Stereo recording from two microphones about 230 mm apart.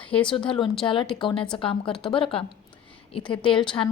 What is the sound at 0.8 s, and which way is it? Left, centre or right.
A woman's voice, left.